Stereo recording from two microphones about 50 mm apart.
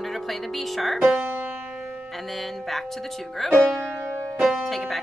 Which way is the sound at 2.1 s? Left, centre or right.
Centre.